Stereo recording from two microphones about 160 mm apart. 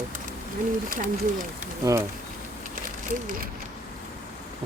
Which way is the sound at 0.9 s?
55° right (ahead or behind).